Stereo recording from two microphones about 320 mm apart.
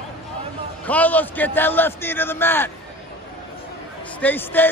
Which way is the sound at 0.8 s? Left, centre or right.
Centre.